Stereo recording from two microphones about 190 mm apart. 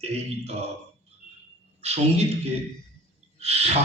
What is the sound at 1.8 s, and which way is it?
Speech, 35° right (ahead or behind).